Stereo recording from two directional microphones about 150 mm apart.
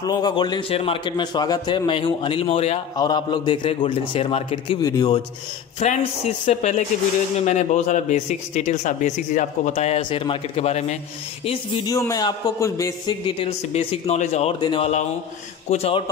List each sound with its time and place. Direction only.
0.0 s a man's voice: 25° left (ahead or behind); by 2.8 s 40° left (ahead or behind)
3.0 s a man's voice: 25° left (ahead or behind)
4.8 s a man's voice: 25° left (ahead or behind)
5.8 s speech: 50° left (ahead or behind)
10.0 s a man's voice: 35° left (ahead or behind)
11.4 s a man's voice: 35° left (ahead or behind)
11.9 s a man's voice: 20° left (ahead or behind)
13.4 s speech: 40° left (ahead or behind)
14.6 s a man's voice: 35° left (ahead or behind)